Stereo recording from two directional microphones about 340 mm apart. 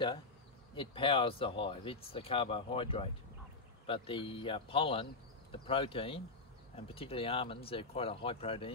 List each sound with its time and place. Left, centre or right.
0.7 s speech: centre